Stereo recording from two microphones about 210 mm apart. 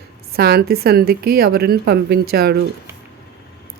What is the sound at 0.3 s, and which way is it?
Speech, 45° right (ahead or behind).